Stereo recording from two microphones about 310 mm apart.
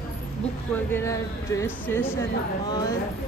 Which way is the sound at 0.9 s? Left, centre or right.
Centre.